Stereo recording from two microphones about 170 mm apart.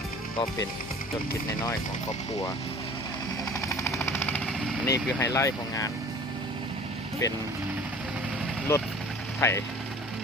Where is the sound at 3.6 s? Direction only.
15° left (ahead or behind).